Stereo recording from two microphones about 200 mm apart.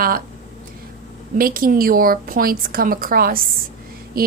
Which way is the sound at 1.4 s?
45° right (ahead or behind).